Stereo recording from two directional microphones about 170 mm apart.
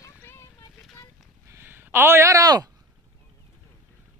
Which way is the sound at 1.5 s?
15° right (ahead or behind).